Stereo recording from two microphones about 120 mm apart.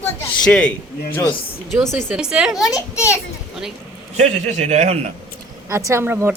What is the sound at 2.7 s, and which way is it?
Speech, 25° left (ahead or behind).